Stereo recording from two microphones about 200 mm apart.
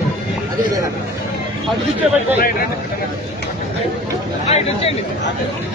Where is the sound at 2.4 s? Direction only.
45° left (ahead or behind).